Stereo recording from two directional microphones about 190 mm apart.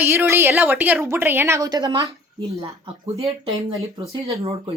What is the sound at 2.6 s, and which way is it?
Speech, 30° right (ahead or behind).